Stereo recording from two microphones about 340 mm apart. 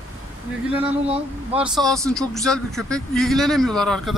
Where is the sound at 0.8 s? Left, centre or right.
Centre.